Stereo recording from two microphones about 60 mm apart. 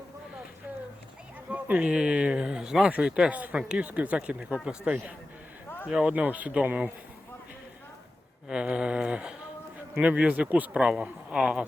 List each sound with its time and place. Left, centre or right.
1.5 s a sound: right
1.9 s speech: centre
4.9 s speech: right
8.4 s speech: centre
10.8 s speech: centre